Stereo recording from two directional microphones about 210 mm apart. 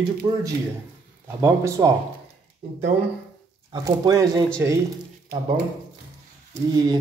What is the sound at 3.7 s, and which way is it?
Speech, 20° right (ahead or behind).